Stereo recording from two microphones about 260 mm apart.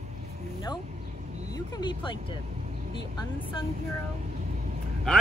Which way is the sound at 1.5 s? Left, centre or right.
Centre.